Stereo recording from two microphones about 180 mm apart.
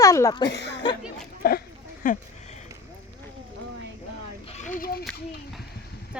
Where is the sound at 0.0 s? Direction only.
20° left (ahead or behind).